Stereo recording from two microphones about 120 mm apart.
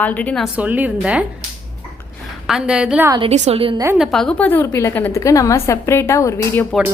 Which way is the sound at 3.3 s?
70° right (ahead or behind).